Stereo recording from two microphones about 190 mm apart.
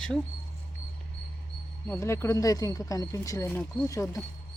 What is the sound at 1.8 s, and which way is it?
Speech, 15° left (ahead or behind).